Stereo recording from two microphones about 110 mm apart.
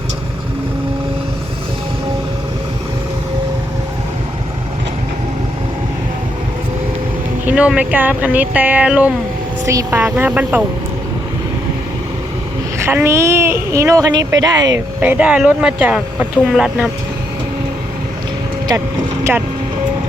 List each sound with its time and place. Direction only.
7.4 s vehicle: 10° right (ahead or behind)
7.8 s speech: 15° right (ahead or behind)
9.6 s speech: 25° right (ahead or behind)
13.1 s speech: 25° right (ahead or behind)
15.0 s speech: 10° right (ahead or behind)